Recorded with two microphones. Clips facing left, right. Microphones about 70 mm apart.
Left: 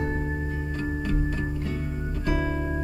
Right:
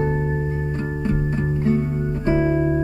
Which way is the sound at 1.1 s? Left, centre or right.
Right.